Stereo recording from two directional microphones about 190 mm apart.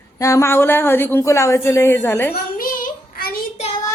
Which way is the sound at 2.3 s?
50° left (ahead or behind).